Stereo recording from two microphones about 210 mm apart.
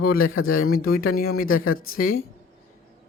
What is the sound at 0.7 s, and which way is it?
Speech, 45° left (ahead or behind).